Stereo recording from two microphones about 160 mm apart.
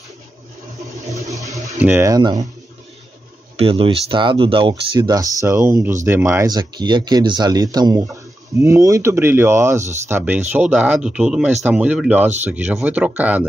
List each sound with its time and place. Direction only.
1.1 s a sound: 20° right (ahead or behind)
1.6 s speech: 15° right (ahead or behind)
3.5 s speech: 35° right (ahead or behind); by 13.5 s 10° right (ahead or behind)